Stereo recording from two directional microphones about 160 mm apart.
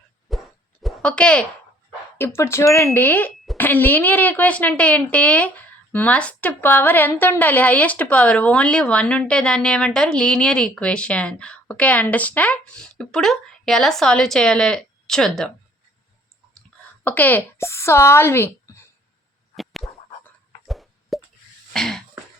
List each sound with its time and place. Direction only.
0.3 s plop: centre (ahead or behind)
2.1 s speech: 15° left (ahead or behind)
17.0 s speech: 10° left (ahead or behind)
19.5 s a sound: centre (ahead or behind)
20.7 s plop: centre (ahead or behind)
21.7 s throat clearing: 5° left (ahead or behind)